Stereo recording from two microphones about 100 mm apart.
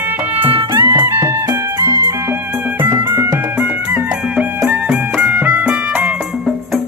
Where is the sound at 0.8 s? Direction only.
20° right (ahead or behind).